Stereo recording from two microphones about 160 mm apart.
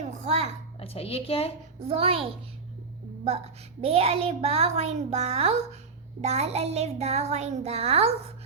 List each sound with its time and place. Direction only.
0.0 s a sound: 45° right (ahead or behind)
0.8 s a woman's voice: 35° left (ahead or behind)
1.8 s a child's voice: 40° right (ahead or behind)
3.2 s a child's voice: 40° right (ahead or behind)